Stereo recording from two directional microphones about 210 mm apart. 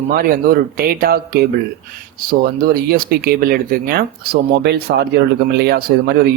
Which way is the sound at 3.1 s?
45° right (ahead or behind).